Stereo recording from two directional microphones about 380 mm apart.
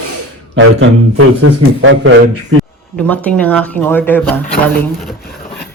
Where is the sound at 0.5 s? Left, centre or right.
Right.